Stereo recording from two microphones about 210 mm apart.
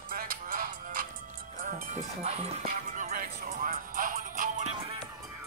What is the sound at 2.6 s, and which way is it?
Music, 40° right (ahead or behind).